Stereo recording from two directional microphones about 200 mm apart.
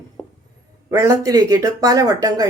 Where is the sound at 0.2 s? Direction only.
5° left (ahead or behind).